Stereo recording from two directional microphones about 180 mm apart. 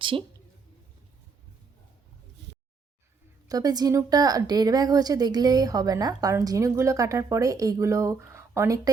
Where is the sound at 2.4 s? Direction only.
75° right (ahead or behind).